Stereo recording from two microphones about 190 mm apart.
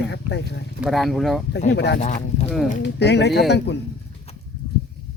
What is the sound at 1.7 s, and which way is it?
Speech, 65° left (ahead or behind).